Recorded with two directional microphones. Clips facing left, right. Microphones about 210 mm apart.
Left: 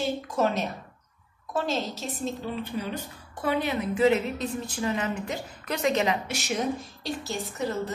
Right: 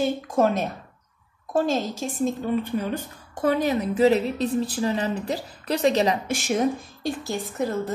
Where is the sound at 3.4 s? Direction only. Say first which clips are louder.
Right 5 dB; 40° right (ahead or behind).